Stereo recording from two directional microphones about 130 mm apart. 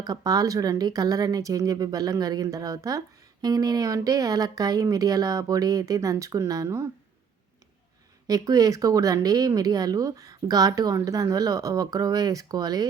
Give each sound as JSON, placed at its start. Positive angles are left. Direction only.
{"t": 0.0, "sound": "speech", "side_deg": -30}
{"t": 8.3, "sound": "speech", "side_deg": -25}